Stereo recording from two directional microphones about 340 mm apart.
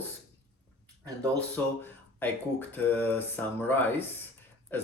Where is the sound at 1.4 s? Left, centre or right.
Centre.